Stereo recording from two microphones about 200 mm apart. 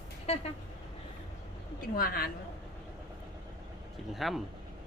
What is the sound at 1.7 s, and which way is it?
Speech, 50° left (ahead or behind).